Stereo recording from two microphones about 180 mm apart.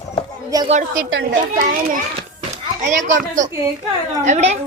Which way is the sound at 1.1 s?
90° right.